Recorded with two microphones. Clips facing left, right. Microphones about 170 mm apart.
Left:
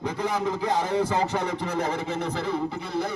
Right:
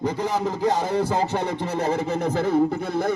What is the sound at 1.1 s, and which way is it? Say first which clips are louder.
A man's voice: right 2 dB; 35° right (ahead or behind).